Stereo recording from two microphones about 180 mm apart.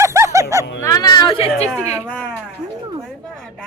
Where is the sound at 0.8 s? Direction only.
20° left (ahead or behind).